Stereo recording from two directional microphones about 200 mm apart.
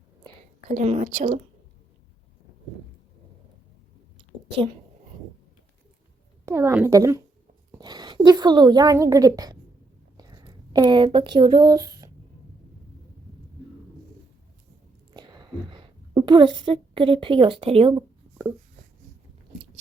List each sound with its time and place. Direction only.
0.7 s a woman's voice: 35° right (ahead or behind)
6.4 s a woman's voice: 10° right (ahead or behind)
15.1 s a sound: 20° right (ahead or behind)